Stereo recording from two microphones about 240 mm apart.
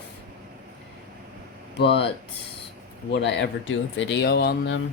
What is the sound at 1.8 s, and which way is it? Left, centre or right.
Speech, left.